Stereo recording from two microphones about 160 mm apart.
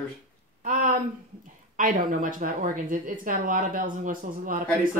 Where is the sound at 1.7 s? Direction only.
60° right (ahead or behind).